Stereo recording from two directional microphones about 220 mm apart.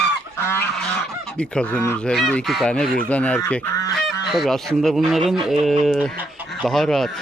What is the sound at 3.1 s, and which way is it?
Goose, 5° left (ahead or behind).